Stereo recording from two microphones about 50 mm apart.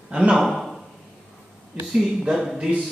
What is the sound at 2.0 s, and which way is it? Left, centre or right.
Speech, centre.